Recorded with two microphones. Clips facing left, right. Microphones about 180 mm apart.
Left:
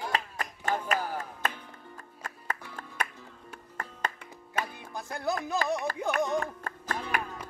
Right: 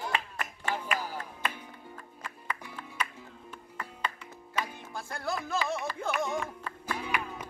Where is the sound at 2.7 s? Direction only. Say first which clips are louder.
Left 1 dB; 45° left (ahead or behind).